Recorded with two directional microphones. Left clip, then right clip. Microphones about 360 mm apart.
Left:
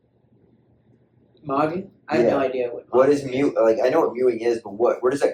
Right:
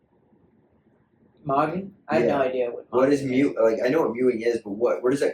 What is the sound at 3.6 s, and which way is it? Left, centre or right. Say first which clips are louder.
Speech: left 4 dB; centre.